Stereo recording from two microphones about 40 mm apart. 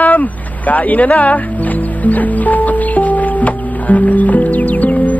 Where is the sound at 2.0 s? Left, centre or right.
Left.